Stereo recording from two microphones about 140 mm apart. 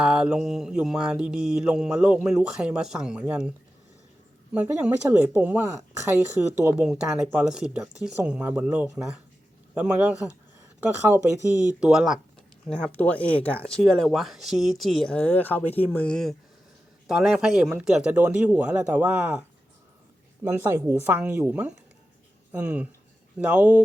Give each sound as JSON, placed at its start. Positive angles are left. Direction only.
{"t": 0.0, "sound": "speech", "side_deg": -5}
{"t": 4.5, "sound": "speech", "side_deg": -10}
{"t": 12.6, "sound": "speech", "side_deg": 5}
{"t": 20.5, "sound": "speech", "side_deg": -20}